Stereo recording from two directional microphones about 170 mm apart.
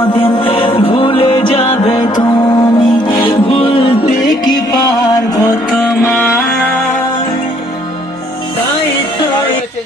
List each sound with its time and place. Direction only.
0.1 s music: 30° left (ahead or behind)
5.7 s music: 10° left (ahead or behind)